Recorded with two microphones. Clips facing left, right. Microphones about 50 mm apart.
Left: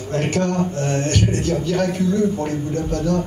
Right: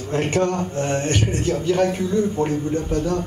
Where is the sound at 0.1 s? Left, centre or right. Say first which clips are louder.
Even; right.